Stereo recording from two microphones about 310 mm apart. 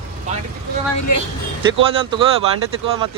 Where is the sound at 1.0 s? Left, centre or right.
Left.